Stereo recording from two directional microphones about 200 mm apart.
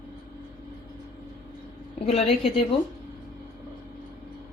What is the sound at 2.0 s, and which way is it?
Speech, 30° left (ahead or behind).